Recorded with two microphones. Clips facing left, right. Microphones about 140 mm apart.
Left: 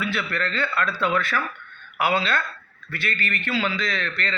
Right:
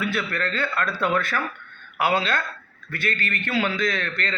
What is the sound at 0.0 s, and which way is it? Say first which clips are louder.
A man's voice: right 1 dB; 45° right (ahead or behind).